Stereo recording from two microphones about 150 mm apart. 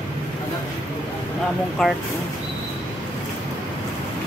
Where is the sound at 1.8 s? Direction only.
Centre (ahead or behind).